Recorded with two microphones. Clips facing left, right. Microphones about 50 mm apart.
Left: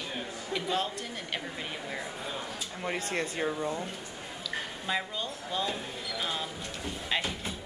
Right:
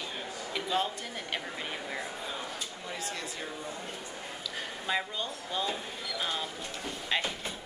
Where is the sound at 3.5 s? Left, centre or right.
Left.